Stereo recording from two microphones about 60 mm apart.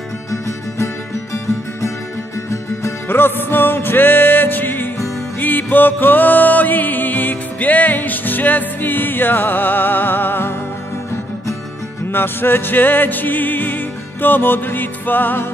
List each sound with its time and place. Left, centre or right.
3.1 s music: left
12.1 s music: left